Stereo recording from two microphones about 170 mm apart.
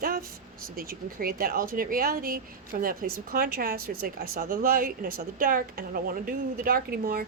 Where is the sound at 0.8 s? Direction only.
60° right (ahead or behind).